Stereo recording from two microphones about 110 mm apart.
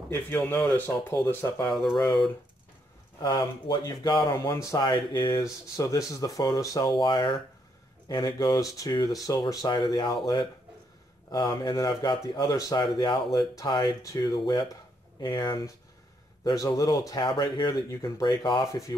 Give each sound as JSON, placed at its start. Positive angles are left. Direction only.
{"t": 0.1, "sound": "speech", "side_deg": 20}
{"t": 3.2, "sound": "speech", "side_deg": 40}
{"t": 4.7, "sound": "speech", "side_deg": 45}
{"t": 5.4, "sound": "speech", "side_deg": 30}
{"t": 16.5, "sound": "speech", "side_deg": 30}
{"t": 17.1, "sound": "speech", "side_deg": 45}
{"t": 17.8, "sound": "speech", "side_deg": 30}
{"t": 18.7, "sound": "speech", "side_deg": 30}